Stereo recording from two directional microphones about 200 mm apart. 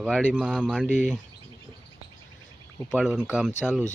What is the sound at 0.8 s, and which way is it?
Speech, 35° left (ahead or behind).